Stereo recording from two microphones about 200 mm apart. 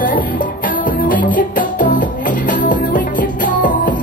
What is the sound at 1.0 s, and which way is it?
Music, 45° left (ahead or behind).